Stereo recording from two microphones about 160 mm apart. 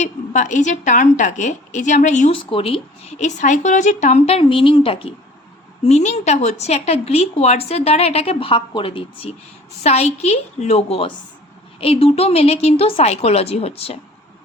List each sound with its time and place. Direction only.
0.0 s a woman's voice: 50° left (ahead or behind)
2.3 s a woman's voice: 35° left (ahead or behind)